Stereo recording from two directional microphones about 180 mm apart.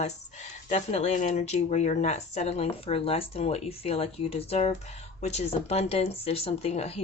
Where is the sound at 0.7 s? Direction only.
35° left (ahead or behind).